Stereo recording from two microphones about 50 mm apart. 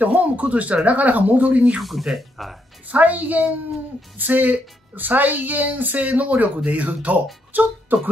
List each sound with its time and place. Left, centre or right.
0.0 s speech: right
1.8 s speech: centre
2.9 s speech: right